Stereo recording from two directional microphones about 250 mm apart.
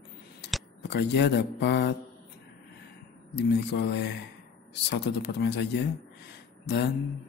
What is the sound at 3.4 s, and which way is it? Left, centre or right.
Speech, left.